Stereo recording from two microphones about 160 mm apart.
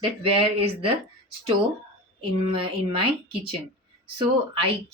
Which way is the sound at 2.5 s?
35° right (ahead or behind).